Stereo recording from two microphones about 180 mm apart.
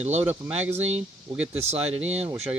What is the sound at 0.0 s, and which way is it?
Speech, 35° right (ahead or behind).